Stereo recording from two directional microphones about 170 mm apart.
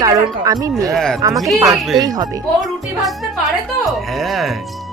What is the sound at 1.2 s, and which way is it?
Speech, 20° right (ahead or behind).